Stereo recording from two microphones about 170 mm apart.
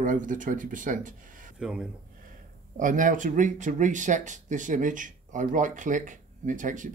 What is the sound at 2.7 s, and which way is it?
Speech, 50° right (ahead or behind).